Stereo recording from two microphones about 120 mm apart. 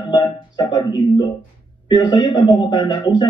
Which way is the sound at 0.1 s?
40° left (ahead or behind).